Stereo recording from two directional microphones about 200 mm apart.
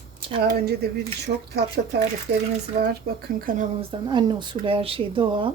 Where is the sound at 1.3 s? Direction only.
40° right (ahead or behind).